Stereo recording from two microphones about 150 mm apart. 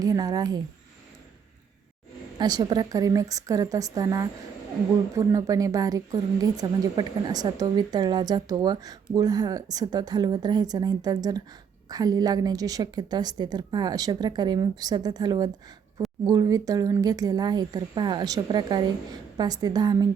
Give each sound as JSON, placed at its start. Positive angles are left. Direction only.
{"t": 0.0, "sound": "a woman's voice", "side_deg": -25}
{"t": 2.4, "sound": "a woman's voice", "side_deg": -30}